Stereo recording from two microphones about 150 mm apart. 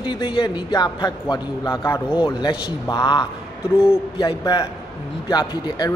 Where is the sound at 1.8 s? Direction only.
15° left (ahead or behind).